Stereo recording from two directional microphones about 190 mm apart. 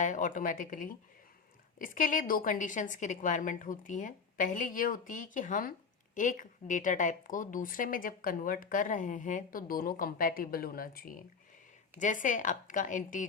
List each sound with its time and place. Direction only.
0.0 s a woman's voice: 40° left (ahead or behind)